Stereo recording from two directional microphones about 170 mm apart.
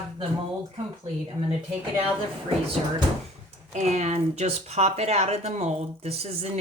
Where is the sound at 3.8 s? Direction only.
40° right (ahead or behind).